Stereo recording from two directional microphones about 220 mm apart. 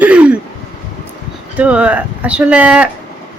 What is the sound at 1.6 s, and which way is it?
Speech, 5° right (ahead or behind).